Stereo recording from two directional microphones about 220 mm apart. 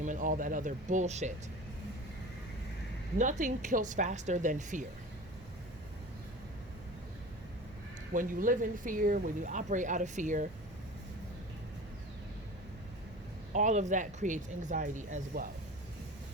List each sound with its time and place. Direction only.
0.0 s speech: 35° right (ahead or behind)
3.2 s speech: 35° right (ahead or behind)
8.1 s speech: 35° right (ahead or behind)
13.5 s speech: 35° right (ahead or behind)